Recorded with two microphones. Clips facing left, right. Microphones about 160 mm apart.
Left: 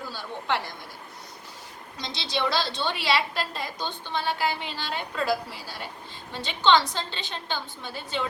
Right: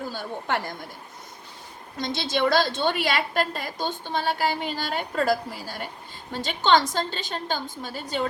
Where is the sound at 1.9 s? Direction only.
50° right (ahead or behind).